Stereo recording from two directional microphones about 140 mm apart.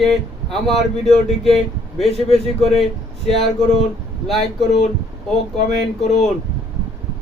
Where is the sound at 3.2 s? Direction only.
45° left (ahead or behind).